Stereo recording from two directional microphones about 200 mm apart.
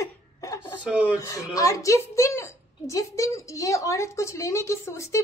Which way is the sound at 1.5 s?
15° left (ahead or behind).